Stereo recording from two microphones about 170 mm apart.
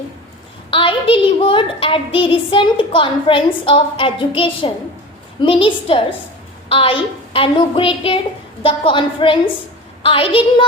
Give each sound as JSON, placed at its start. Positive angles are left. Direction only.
{"t": 0.7, "sound": "a woman's voice", "side_deg": 30}